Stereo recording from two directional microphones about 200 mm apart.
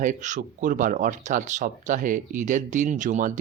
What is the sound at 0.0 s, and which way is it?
Speech, 40° right (ahead or behind).